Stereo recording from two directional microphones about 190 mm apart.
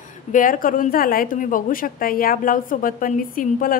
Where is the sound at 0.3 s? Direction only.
45° left (ahead or behind).